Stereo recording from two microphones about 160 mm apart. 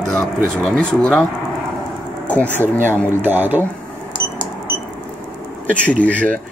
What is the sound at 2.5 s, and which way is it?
Speech, 15° right (ahead or behind).